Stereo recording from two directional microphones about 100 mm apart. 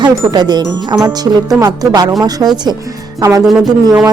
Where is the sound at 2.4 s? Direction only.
30° right (ahead or behind).